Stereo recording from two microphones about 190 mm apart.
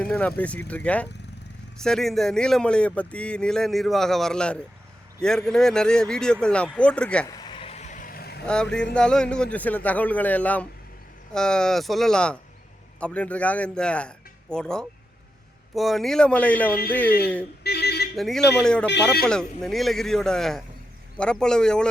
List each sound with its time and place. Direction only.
0.0 s speech: 5° left (ahead or behind)
7.3 s vehicle: 20° left (ahead or behind); by 8.4 s 55° left (ahead or behind)
8.4 s speech: 5° left (ahead or behind)
17.6 s a sound: 60° left (ahead or behind)
18.2 s speech: centre (ahead or behind)